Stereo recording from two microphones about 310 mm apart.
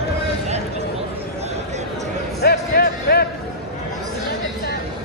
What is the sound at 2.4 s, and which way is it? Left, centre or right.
Music, left.